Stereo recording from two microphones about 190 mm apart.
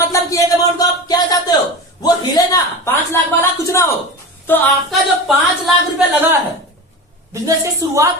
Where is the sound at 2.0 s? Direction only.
20° left (ahead or behind).